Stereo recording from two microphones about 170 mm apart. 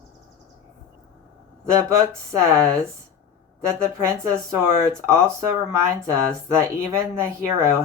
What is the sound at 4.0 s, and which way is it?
Speech, 15° right (ahead or behind).